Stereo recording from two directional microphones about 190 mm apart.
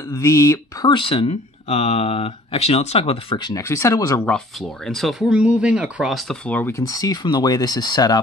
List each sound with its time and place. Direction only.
0.1 s speech: 15° left (ahead or behind)
4.3 s speech: centre (ahead or behind); by 8.2 s 20° left (ahead or behind)